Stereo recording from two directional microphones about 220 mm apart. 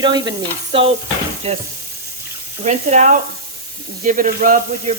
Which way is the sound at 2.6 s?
35° right (ahead or behind).